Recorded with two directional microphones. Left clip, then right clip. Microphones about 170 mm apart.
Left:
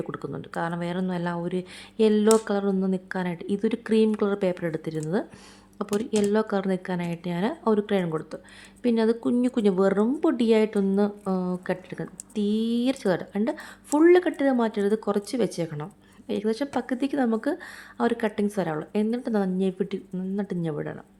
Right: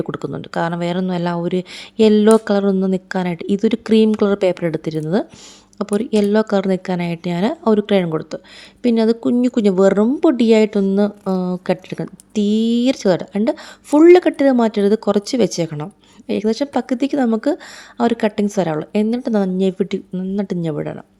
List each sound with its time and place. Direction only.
0.0 s speech: 35° right (ahead or behind)